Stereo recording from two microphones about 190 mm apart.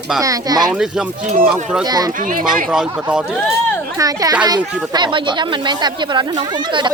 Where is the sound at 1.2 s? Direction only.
40° right (ahead or behind).